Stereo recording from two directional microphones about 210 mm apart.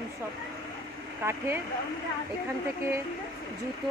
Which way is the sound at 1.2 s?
10° right (ahead or behind).